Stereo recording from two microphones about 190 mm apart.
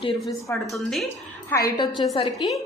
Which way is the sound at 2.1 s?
25° left (ahead or behind).